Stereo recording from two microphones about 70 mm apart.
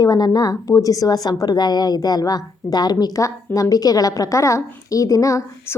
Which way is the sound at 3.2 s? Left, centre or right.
Left.